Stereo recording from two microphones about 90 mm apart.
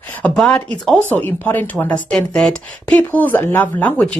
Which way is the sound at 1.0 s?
20° left (ahead or behind).